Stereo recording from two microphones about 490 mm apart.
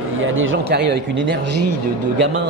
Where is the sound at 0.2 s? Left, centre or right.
Right.